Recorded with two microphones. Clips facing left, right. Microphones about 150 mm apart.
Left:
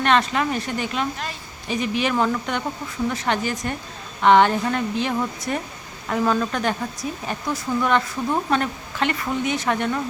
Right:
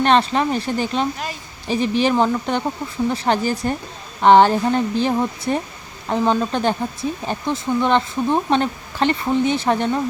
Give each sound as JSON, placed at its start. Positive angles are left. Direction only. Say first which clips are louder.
{"t": 0.0, "sound": "speech", "louder": "right 3 dB", "side_deg": -30}